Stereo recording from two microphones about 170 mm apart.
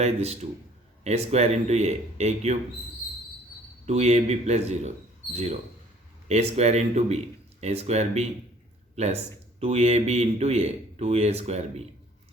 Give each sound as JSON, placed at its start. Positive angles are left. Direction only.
{"t": 0.0, "sound": "a man's voice", "side_deg": -40}
{"t": 3.8, "sound": "a man's voice", "side_deg": -40}
{"t": 9.6, "sound": "a man's voice", "side_deg": -40}